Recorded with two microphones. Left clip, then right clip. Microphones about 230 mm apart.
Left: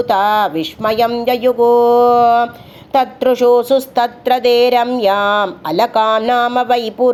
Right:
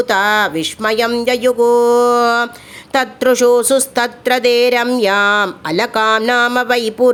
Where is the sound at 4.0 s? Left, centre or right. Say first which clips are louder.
Left 1 dB; right.